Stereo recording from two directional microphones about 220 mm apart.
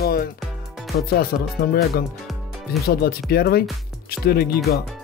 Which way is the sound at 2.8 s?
45° left (ahead or behind).